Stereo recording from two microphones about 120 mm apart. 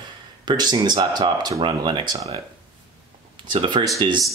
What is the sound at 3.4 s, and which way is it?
Speech, 45° right (ahead or behind).